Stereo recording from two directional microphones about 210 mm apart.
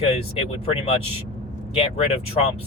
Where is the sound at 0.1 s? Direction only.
30° left (ahead or behind).